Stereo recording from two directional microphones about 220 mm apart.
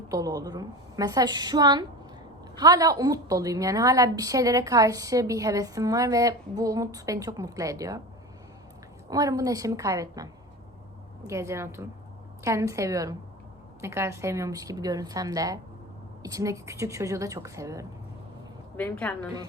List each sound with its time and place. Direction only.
0.1 s a woman's voice: 15° right (ahead or behind)
9.0 s a woman's voice: 15° right (ahead or behind)
11.3 s a woman's voice: 15° right (ahead or behind)
18.8 s a woman's voice: 5° left (ahead or behind)